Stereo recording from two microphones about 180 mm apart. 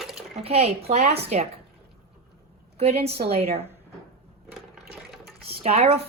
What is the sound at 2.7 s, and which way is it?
Speech, 35° right (ahead or behind).